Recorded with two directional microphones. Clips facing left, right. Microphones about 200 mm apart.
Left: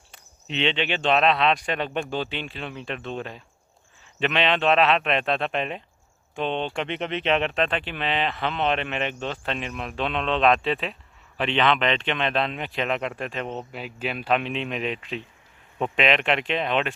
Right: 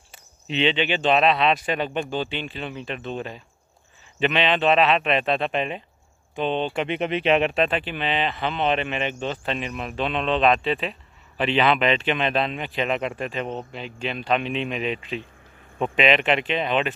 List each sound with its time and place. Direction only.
0.1 s speech: centre (ahead or behind)